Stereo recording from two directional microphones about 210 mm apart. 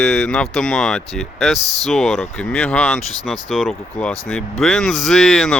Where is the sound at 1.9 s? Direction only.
Centre (ahead or behind).